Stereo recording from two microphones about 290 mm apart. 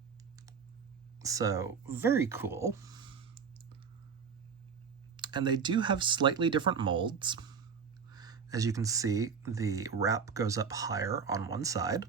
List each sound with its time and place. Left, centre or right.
1.2 s speech: centre
5.1 s speech: centre